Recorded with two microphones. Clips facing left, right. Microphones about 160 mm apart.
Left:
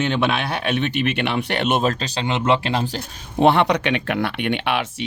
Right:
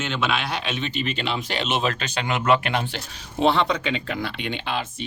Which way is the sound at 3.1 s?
55° left (ahead or behind).